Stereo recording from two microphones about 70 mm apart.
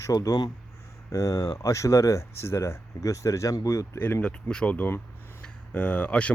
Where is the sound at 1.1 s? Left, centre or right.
Left.